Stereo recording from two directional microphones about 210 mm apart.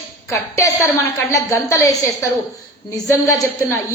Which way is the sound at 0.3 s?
15° left (ahead or behind).